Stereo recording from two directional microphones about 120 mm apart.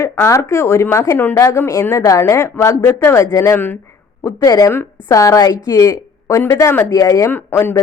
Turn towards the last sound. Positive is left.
turn(degrees=20)  # may be behind; listen again after turning